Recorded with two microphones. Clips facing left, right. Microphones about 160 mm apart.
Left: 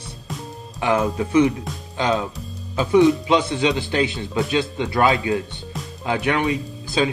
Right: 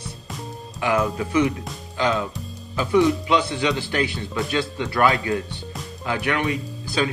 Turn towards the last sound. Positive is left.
turn(degrees=20)  # may be behind; listen again after turning